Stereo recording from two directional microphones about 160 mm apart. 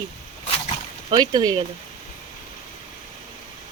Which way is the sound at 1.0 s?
25° right (ahead or behind).